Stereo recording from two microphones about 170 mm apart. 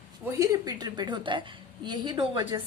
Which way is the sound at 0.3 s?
20° right (ahead or behind).